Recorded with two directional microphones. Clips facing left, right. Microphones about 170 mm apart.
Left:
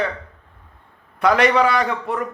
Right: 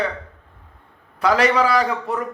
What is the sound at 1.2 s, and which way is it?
Speech, 30° right (ahead or behind).